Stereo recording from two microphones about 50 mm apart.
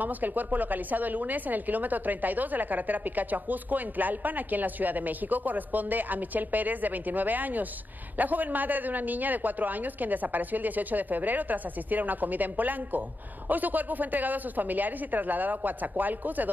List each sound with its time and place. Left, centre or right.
0.0 s a woman's voice: right